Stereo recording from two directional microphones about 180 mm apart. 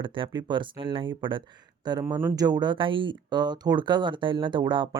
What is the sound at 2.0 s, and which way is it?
Speech, 15° right (ahead or behind).